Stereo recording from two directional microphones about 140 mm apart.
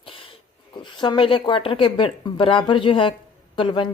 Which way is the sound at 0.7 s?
35° left (ahead or behind).